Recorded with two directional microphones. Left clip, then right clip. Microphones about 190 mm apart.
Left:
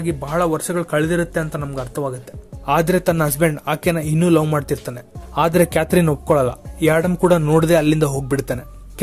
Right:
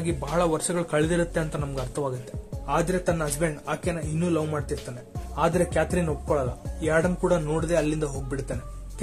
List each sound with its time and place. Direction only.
0.0 s a man's voice: 20° left (ahead or behind)
2.6 s speech: 45° left (ahead or behind)